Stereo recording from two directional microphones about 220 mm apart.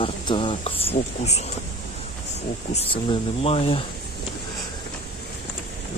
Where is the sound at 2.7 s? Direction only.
25° left (ahead or behind).